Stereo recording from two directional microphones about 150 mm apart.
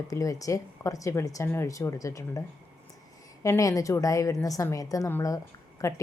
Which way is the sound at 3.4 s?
20° left (ahead or behind).